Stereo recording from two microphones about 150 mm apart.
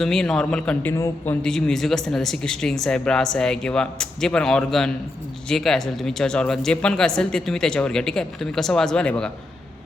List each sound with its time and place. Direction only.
0.0 s a man's voice: centre (ahead or behind)